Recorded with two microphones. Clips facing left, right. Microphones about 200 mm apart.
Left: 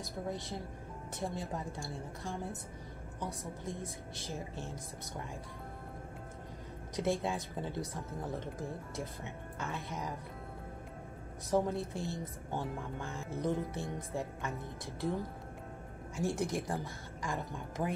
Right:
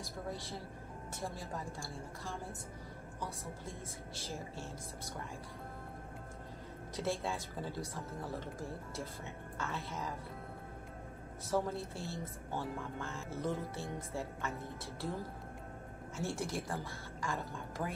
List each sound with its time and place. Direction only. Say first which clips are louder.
0.0 s a woman's voice: left 3 dB; 20° left (ahead or behind)
7.0 s speech: left 4 dB; 15° left (ahead or behind)
11.5 s speech: left 4 dB; 15° left (ahead or behind)